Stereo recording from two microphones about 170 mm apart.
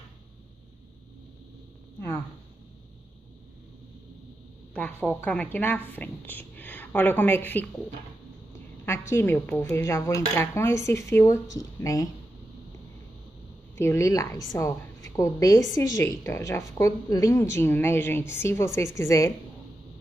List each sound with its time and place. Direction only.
4.7 s a woman's voice: 10° left (ahead or behind)
8.8 s a woman's voice: 15° left (ahead or behind)
13.7 s a woman's voice: 15° left (ahead or behind)